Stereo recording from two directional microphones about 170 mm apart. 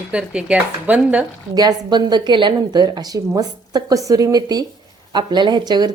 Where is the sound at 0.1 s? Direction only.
5° right (ahead or behind).